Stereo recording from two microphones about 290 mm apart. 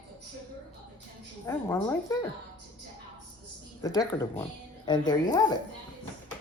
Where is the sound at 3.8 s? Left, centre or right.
Centre.